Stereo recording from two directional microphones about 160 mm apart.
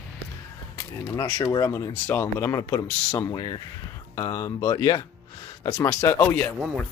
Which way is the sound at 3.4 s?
25° left (ahead or behind).